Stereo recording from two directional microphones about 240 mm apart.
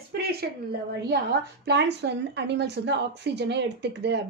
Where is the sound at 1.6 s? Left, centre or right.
Right.